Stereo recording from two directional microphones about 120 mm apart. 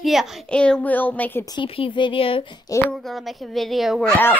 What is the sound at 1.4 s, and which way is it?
Speech, 35° left (ahead or behind).